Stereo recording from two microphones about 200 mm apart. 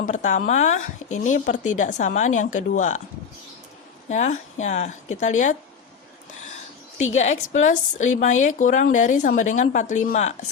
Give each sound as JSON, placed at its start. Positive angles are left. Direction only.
{"t": 0.0, "sound": "a woman's voice", "side_deg": 40}
{"t": 4.1, "sound": "a woman's voice", "side_deg": 35}
{"t": 7.0, "sound": "a woman's voice", "side_deg": 35}